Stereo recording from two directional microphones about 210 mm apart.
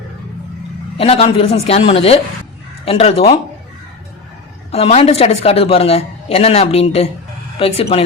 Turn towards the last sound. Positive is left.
turn(degrees=30)  # may be behind; listen again after turning